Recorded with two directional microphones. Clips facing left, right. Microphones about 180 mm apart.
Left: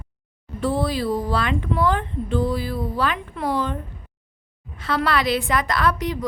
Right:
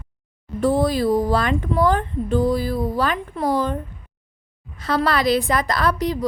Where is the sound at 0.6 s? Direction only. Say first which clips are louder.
Right 4 dB; 45° right (ahead or behind).